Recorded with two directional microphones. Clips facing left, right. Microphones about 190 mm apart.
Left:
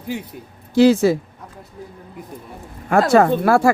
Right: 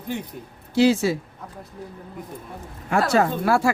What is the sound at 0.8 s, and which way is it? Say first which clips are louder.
Speech: left 5 dB; 50° left (ahead or behind).